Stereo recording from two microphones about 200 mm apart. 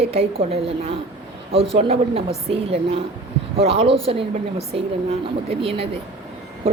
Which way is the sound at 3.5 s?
30° right (ahead or behind).